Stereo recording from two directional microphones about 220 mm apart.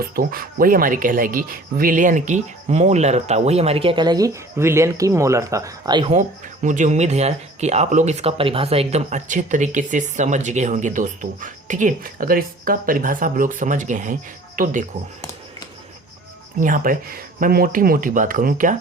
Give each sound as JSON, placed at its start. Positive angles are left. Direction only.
{"t": 0.0, "sound": "speech", "side_deg": -40}
{"t": 6.1, "sound": "speech", "side_deg": -35}
{"t": 16.6, "sound": "speech", "side_deg": -35}